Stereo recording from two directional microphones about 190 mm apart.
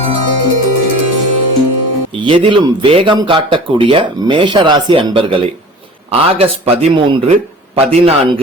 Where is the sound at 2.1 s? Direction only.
25° right (ahead or behind).